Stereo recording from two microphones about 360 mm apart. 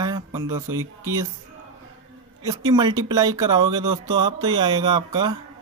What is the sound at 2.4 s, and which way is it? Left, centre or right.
Speech, centre.